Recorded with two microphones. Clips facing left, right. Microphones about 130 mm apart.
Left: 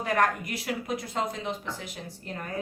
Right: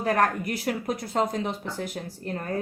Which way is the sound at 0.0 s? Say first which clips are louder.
Right 2 dB; 35° right (ahead or behind).